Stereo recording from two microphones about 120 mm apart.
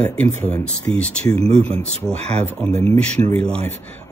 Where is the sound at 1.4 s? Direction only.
55° right (ahead or behind).